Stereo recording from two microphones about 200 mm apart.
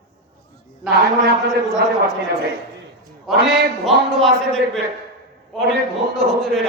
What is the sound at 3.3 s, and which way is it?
Speech, centre (ahead or behind).